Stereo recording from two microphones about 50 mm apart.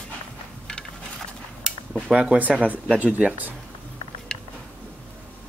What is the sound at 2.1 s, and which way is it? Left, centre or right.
Speech, right.